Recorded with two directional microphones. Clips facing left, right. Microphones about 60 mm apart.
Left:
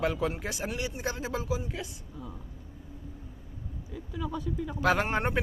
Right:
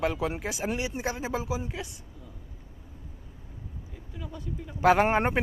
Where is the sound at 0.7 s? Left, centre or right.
Centre.